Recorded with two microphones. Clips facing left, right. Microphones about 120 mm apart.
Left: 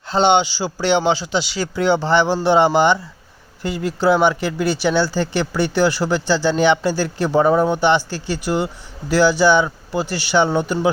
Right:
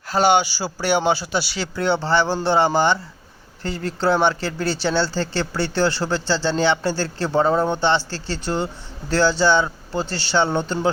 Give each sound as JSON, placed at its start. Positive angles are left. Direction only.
{"t": 0.1, "sound": "speech", "side_deg": 25}